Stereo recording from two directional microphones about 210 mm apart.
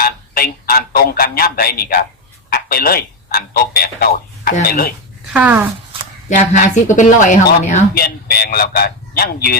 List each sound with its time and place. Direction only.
0.0 s a sound: 45° left (ahead or behind)
2.5 s speech: 45° left (ahead or behind)
5.3 s speech: 5° right (ahead or behind)
6.2 s speech: 35° left (ahead or behind)